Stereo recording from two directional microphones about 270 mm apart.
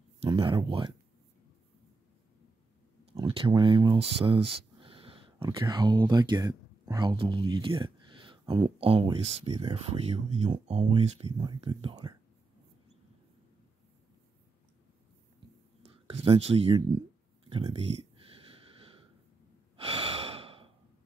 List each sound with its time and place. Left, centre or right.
0.2 s speech: centre
3.2 s speech: centre
15.9 s speech: right
19.8 s breathing: right